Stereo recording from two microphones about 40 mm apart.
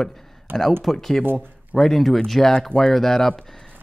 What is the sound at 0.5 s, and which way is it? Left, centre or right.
Speech, right.